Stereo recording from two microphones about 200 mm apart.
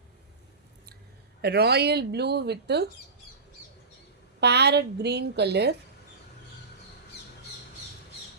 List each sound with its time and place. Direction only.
1.4 s speech: 55° right (ahead or behind)
4.4 s speech: 55° right (ahead or behind)